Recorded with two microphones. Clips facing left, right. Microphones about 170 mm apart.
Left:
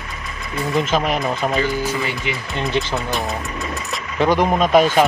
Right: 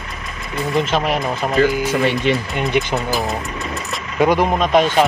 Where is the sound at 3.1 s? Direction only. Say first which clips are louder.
Right 2 dB; centre (ahead or behind).